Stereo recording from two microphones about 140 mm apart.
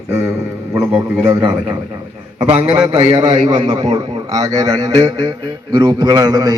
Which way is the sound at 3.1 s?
35° right (ahead or behind).